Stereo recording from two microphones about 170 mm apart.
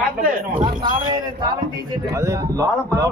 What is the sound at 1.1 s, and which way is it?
A man's voice, 25° right (ahead or behind).